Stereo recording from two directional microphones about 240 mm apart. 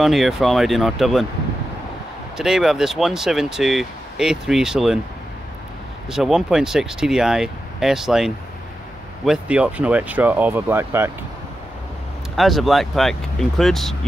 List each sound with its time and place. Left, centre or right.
0.0 s speech: centre
2.3 s speech: centre
6.0 s speech: centre
12.4 s speech: centre